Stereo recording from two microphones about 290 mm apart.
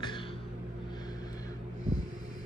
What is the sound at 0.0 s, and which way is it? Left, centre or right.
Music, centre.